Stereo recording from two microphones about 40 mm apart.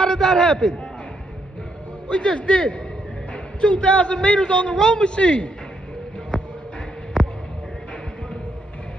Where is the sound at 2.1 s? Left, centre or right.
Left.